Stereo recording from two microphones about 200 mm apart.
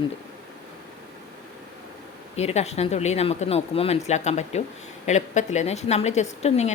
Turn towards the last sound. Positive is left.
turn(degrees=35)  # may be behind; listen again after turning